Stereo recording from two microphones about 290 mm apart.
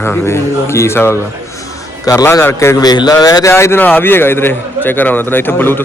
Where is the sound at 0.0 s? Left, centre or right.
Centre.